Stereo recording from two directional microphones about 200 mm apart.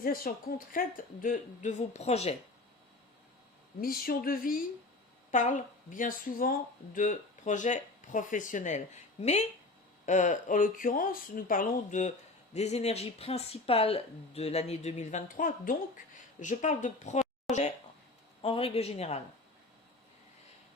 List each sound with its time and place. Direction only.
0.0 s speech: 45° left (ahead or behind)
3.8 s speech: 45° left (ahead or behind); by 19.2 s 30° left (ahead or behind)